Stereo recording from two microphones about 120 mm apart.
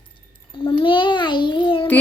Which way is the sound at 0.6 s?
45° left (ahead or behind).